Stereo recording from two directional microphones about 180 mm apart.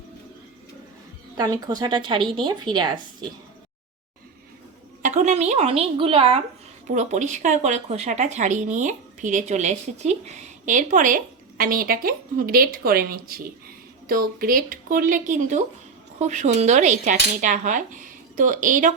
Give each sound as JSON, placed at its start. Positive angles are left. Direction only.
{"t": 1.4, "sound": "a woman's voice", "side_deg": -20}
{"t": 5.0, "sound": "a woman's voice", "side_deg": -40}